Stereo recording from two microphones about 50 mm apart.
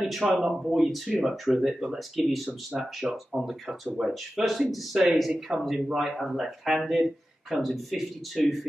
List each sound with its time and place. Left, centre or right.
0.0 s a man's voice: centre
4.9 s speech: centre